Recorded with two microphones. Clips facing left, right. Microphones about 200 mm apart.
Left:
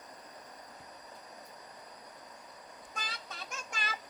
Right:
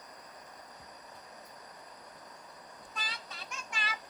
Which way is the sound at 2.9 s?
50° left (ahead or behind).